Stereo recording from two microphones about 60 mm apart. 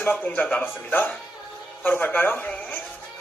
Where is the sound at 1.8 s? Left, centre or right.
Left.